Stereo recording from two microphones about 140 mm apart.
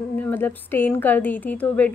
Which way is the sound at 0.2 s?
15° left (ahead or behind).